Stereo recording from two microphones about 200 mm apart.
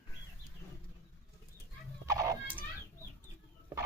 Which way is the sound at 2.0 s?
15° right (ahead or behind).